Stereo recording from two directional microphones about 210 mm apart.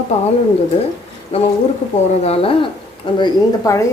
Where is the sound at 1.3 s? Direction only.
30° left (ahead or behind).